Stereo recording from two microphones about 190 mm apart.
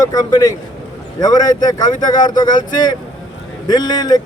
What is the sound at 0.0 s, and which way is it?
Speech, 20° left (ahead or behind).